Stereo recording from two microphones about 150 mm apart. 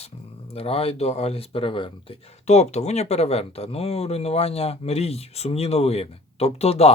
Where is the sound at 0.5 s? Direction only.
40° left (ahead or behind).